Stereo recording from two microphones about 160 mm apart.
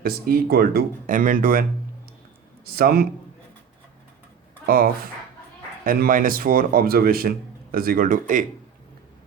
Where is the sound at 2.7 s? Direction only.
70° right (ahead or behind).